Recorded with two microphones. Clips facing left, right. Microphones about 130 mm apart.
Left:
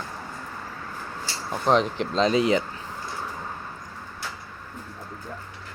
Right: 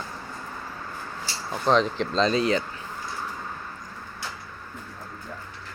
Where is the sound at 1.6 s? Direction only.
10° left (ahead or behind).